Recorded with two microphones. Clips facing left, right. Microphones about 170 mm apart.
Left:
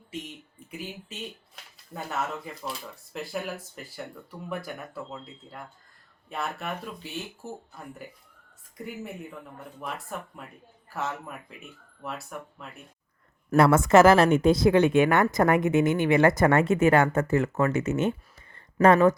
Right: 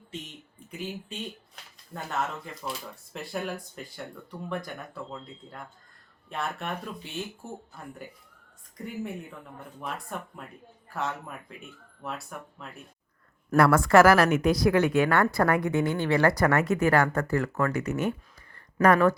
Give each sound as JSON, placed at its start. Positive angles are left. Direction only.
{"t": 1.9, "sound": "speech", "side_deg": 5}
{"t": 9.8, "sound": "speech", "side_deg": 0}
{"t": 13.6, "sound": "a woman's voice", "side_deg": 20}